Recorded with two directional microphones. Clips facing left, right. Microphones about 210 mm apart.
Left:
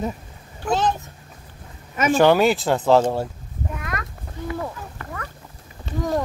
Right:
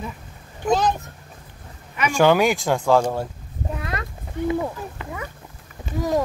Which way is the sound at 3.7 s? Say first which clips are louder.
Right 2 dB; 30° right (ahead or behind).